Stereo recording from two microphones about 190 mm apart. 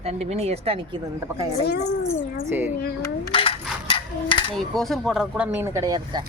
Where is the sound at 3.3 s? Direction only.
30° left (ahead or behind).